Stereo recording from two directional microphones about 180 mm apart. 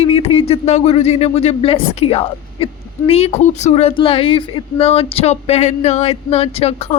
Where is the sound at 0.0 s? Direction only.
35° left (ahead or behind).